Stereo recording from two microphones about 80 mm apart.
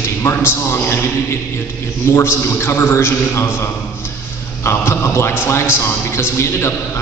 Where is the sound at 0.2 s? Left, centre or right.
Left.